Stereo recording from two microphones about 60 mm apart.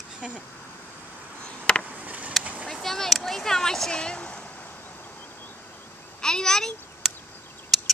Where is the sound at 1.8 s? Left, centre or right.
Right.